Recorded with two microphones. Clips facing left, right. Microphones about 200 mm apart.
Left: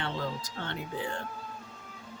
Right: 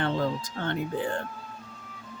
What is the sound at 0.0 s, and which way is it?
Speech, 50° right (ahead or behind).